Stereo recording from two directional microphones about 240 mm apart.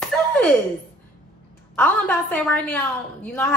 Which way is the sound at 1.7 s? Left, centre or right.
Centre.